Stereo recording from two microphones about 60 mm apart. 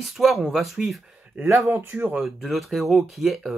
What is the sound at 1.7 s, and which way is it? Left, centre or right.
Speech, right.